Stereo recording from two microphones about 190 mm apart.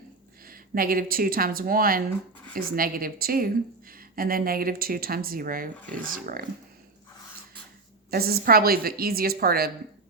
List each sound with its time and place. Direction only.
0.4 s speech: 50° right (ahead or behind)
8.1 s speech: 55° right (ahead or behind)